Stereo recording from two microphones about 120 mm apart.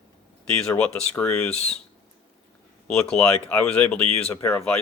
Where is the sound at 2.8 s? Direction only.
10° left (ahead or behind).